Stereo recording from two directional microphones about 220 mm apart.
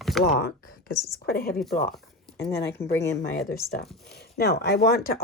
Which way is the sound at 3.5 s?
45° left (ahead or behind).